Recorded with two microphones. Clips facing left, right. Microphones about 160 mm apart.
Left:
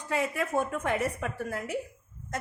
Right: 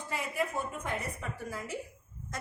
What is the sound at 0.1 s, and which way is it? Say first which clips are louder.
A woman's voice: left 6 dB; 85° left.